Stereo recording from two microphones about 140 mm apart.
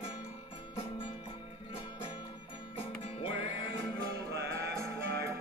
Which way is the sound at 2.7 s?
40° left (ahead or behind).